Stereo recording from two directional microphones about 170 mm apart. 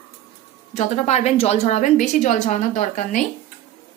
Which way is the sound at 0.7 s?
45° left (ahead or behind).